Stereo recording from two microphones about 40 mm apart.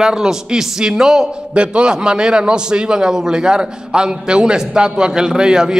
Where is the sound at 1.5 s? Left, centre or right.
Right.